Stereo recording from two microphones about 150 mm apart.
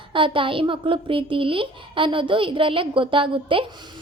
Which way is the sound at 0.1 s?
35° right (ahead or behind).